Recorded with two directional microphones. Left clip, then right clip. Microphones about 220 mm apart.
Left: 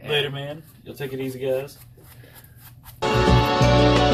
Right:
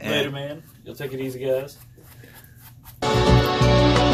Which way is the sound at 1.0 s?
5° right (ahead or behind).